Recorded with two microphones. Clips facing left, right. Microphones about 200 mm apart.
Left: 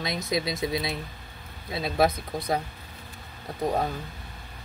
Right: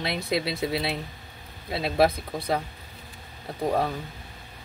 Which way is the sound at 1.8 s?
30° right (ahead or behind).